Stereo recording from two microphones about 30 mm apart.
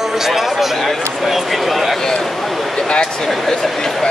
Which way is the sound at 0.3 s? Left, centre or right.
Centre.